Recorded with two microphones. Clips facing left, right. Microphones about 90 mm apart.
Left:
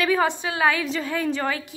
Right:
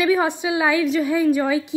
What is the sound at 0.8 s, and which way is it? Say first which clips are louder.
Speech: right 7 dB; 5° right (ahead or behind).